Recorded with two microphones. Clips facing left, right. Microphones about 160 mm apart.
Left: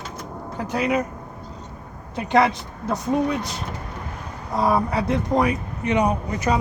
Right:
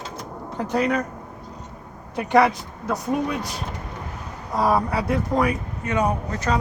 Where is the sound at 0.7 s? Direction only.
10° left (ahead or behind).